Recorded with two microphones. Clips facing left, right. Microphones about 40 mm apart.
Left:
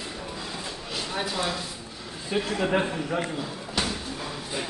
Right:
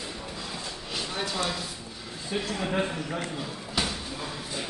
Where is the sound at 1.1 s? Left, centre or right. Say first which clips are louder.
Left 2 dB; centre.